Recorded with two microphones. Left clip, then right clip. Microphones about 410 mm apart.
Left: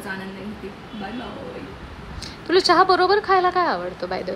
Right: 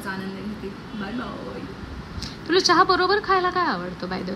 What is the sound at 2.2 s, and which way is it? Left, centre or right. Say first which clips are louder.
A woman's voice: left 2 dB; centre.